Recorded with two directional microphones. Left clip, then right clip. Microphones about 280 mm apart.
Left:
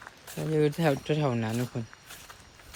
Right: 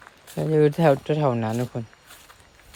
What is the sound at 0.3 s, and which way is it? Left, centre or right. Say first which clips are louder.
Speech: right 7 dB; right.